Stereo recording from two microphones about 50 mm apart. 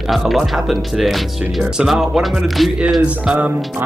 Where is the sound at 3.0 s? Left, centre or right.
Right.